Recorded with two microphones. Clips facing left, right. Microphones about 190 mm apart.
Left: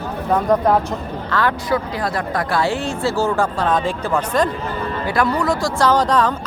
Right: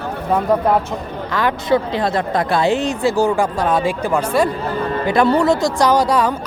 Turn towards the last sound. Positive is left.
turn(degrees=-10)  # may be behind; listen again after turning